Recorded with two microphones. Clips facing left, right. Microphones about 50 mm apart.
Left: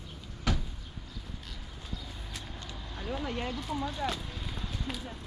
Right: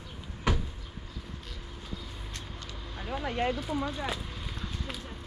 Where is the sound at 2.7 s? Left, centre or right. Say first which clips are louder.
Right 1 dB; centre.